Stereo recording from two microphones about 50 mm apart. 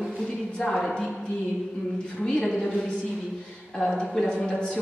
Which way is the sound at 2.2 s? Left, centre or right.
Centre.